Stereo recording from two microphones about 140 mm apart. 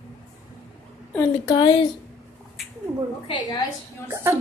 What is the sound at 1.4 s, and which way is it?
Speech, 30° left (ahead or behind).